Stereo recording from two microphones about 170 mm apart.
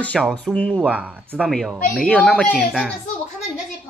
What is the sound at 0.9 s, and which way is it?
Speech, 10° right (ahead or behind).